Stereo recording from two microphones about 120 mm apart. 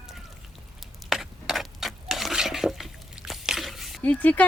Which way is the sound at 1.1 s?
Centre (ahead or behind).